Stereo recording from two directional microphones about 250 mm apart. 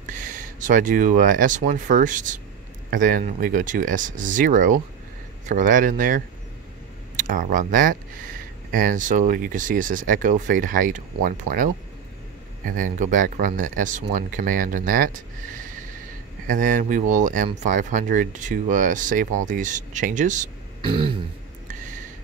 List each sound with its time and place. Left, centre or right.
0.0 s speech: right